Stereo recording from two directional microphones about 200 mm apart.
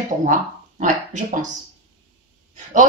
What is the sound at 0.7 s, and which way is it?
Speech, 40° right (ahead or behind).